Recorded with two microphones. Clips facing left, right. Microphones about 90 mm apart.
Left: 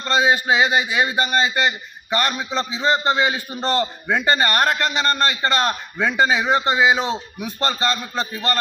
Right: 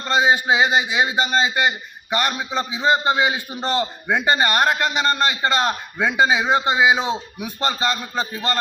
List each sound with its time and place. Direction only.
0.0 s a man's voice: 15° right (ahead or behind)